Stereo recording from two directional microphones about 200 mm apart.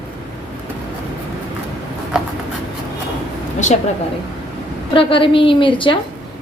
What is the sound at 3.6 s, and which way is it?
Speech, 35° left (ahead or behind).